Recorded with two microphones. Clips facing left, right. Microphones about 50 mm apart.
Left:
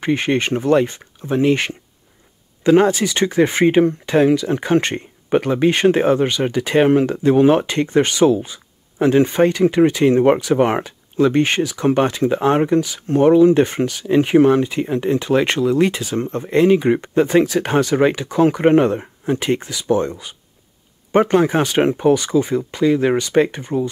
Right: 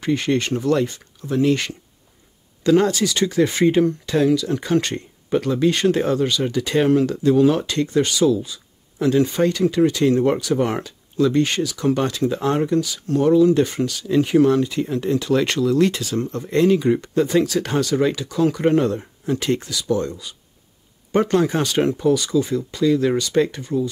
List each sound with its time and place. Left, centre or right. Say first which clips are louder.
0.0 s speech: left 2 dB; left